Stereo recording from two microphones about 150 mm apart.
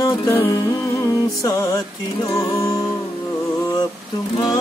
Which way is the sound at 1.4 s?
20° left (ahead or behind).